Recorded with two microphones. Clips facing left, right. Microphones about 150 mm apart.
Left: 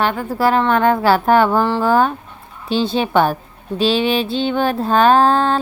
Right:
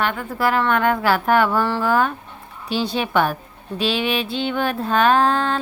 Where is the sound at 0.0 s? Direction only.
35° left (ahead or behind).